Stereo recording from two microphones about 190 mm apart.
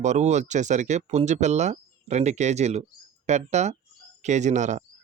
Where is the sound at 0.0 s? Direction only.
35° right (ahead or behind).